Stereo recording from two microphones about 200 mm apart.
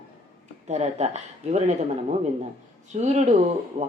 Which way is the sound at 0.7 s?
35° right (ahead or behind).